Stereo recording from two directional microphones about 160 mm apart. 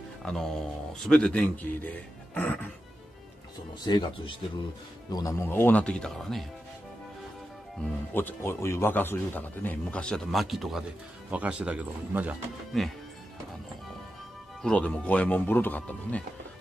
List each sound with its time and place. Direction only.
0.2 s a man's voice: 5° left (ahead or behind)
3.9 s speech: 25° left (ahead or behind)
5.1 s a man's voice: 20° left (ahead or behind); by 6.4 s centre (ahead or behind)
8.1 s a man's voice: 15° left (ahead or behind); by 12.4 s 10° right (ahead or behind)
12.7 s speech: centre (ahead or behind)
14.6 s a man's voice: 5° left (ahead or behind)